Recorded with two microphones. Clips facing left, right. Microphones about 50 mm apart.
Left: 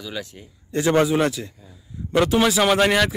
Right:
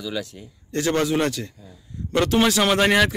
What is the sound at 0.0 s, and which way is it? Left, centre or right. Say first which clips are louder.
Speech: right 3 dB; centre.